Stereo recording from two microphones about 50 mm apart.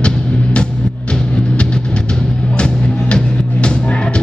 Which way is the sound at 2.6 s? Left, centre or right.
Centre.